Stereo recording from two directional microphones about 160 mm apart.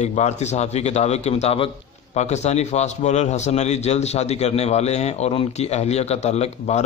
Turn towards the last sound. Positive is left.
turn(degrees=45)  # may be behind; listen again after turning